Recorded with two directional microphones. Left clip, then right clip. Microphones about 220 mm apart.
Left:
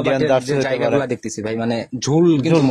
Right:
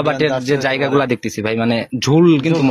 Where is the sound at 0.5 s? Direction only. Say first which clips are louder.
Right 2 dB; 15° right (ahead or behind).